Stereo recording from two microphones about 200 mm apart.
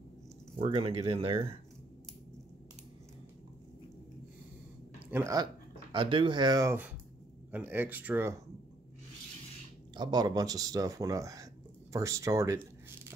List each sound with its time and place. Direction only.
0.6 s speech: 30° right (ahead or behind)
4.9 s speech: 10° right (ahead or behind)
9.9 s speech: 20° right (ahead or behind)